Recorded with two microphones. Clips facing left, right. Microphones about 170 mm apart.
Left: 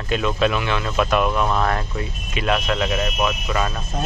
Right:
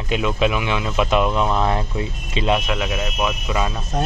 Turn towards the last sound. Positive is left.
turn(degrees=-10)  # may be behind; listen again after turning